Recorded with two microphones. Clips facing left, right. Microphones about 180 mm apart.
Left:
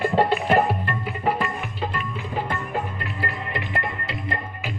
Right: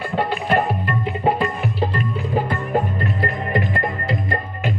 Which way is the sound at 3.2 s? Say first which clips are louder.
Right 7 dB; 45° right (ahead or behind).